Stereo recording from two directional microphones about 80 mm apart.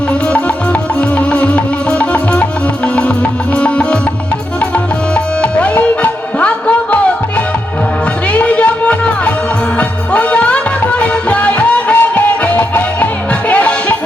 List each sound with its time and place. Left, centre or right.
0.1 s music: centre
4.6 s tabla: centre
8.3 s music: centre